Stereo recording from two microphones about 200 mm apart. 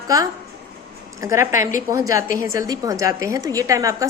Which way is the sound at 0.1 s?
15° right (ahead or behind).